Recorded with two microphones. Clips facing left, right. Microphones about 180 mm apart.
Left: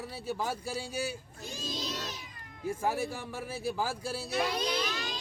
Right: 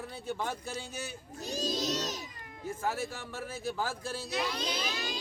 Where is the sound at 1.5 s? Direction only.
40° right (ahead or behind).